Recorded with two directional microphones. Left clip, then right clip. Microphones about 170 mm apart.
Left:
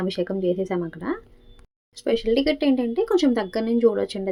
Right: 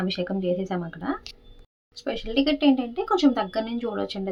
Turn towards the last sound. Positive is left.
turn(degrees=20)  # may be behind; listen again after turning